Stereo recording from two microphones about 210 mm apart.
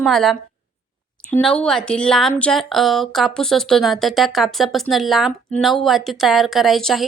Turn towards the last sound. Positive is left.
turn(degrees=0)  # may be behind; listen again after turning